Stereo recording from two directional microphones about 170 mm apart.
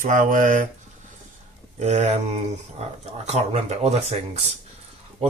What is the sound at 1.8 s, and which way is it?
Speech, 40° right (ahead or behind).